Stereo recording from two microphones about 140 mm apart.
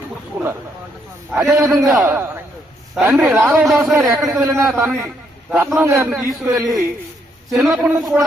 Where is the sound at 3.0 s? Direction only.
Centre (ahead or behind).